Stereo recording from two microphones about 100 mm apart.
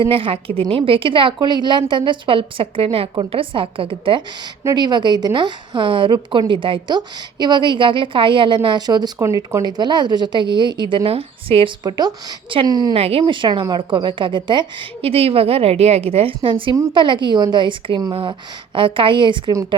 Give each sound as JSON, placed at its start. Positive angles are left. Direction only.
{"t": 0.0, "sound": "a woman's voice", "side_deg": -65}
{"t": 4.7, "sound": "a woman's voice", "side_deg": -45}
{"t": 9.1, "sound": "a woman's voice", "side_deg": -30}
{"t": 11.8, "sound": "a woman's voice", "side_deg": -45}
{"t": 12.9, "sound": "a woman's voice", "side_deg": -75}
{"t": 13.2, "sound": "a woman's voice", "side_deg": -50}
{"t": 15.0, "sound": "a woman's voice", "side_deg": -75}